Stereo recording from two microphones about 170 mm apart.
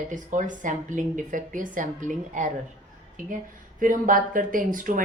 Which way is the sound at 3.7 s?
50° right (ahead or behind).